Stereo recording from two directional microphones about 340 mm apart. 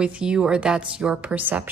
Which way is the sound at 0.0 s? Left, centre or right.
Centre.